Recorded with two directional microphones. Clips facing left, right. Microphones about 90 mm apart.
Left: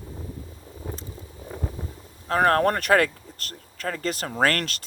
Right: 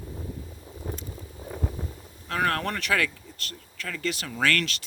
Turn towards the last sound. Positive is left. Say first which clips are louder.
# left 3 dB
turn(degrees=45)  # may be behind; listen again after turning